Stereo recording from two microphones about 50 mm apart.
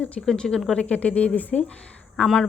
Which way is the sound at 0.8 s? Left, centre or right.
Left.